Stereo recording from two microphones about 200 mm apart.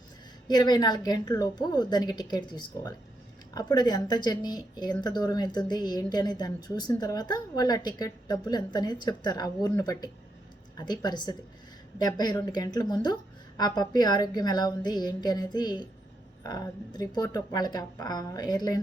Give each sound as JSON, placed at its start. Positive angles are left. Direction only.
{"t": 0.4, "sound": "speech", "side_deg": 20}